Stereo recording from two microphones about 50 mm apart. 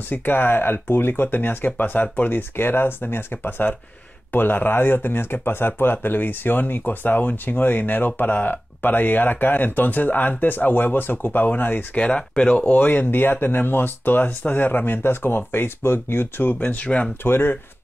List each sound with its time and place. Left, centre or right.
0.1 s speech: left
12.0 s speech: centre
17.2 s speech: left